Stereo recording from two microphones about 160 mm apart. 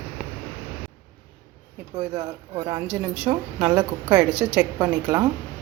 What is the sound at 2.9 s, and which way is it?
A woman's voice, 5° right (ahead or behind).